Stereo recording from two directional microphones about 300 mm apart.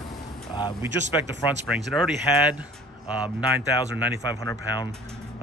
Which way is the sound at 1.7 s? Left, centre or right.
Centre.